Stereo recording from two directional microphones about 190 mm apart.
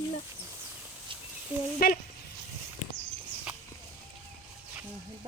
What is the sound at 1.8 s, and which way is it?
Speech, 50° left (ahead or behind).